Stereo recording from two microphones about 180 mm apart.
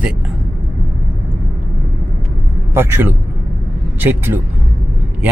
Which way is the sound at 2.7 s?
15° right (ahead or behind).